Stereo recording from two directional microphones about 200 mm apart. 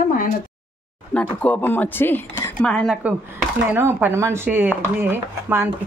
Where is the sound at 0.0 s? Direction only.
40° left (ahead or behind).